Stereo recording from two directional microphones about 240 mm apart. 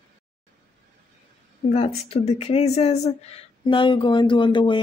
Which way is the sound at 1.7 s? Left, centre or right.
Left.